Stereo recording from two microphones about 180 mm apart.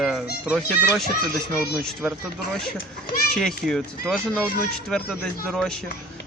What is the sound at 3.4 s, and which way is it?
Speech, 5° left (ahead or behind).